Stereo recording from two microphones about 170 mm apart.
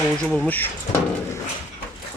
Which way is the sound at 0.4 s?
10° left (ahead or behind).